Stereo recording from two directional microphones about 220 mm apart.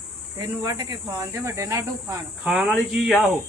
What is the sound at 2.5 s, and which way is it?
Speech, centre (ahead or behind).